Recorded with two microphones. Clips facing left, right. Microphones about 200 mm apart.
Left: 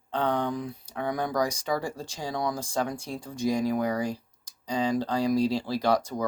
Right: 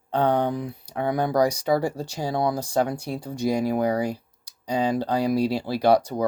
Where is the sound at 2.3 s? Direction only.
30° right (ahead or behind).